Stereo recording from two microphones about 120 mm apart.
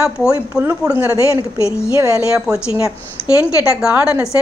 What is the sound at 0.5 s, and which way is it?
Speech, 15° right (ahead or behind).